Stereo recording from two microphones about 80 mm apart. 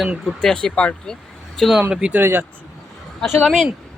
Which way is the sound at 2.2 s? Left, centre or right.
Right.